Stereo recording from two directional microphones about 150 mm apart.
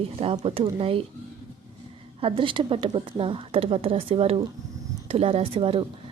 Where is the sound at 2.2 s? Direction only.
35° right (ahead or behind).